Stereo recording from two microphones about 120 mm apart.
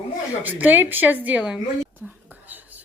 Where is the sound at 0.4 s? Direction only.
15° right (ahead or behind).